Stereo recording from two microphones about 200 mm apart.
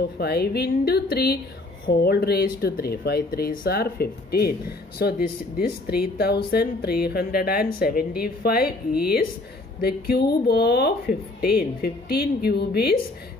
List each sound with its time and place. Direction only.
0.2 s speech: 50° left (ahead or behind)